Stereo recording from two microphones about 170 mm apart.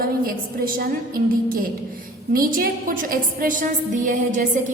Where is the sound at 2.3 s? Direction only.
55° right (ahead or behind).